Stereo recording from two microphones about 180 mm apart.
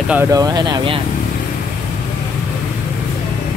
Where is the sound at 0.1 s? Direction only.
15° right (ahead or behind).